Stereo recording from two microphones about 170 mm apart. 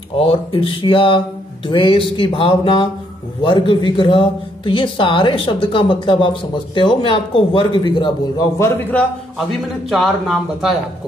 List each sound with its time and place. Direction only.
0.1 s speech: 35° left (ahead or behind); by 9.0 s 15° left (ahead or behind)
9.5 s a man's voice: centre (ahead or behind)